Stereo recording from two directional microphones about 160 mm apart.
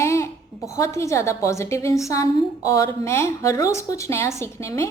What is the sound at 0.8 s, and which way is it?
A woman's voice, 20° left (ahead or behind).